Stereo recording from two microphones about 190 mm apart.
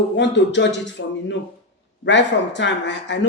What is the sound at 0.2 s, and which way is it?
A man's voice, 70° left (ahead or behind).